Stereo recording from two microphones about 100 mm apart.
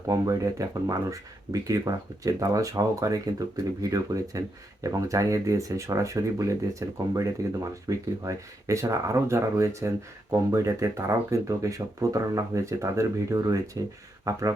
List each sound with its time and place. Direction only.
0.1 s speech: 30° right (ahead or behind)